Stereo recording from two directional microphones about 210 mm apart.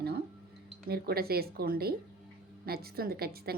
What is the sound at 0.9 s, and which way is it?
A woman's voice, 45° right (ahead or behind).